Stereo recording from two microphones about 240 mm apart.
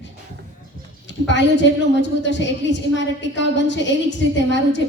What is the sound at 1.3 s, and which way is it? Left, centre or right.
A woman's voice, left.